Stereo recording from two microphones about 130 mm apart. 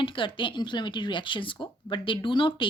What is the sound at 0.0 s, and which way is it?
Speech, 40° left (ahead or behind).